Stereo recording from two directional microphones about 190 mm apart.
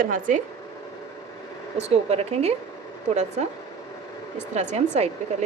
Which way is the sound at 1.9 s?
35° right (ahead or behind).